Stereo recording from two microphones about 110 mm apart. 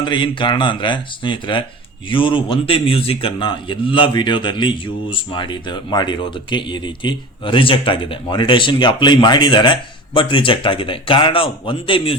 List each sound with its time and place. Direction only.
0.0 s a man's voice: 45° left (ahead or behind)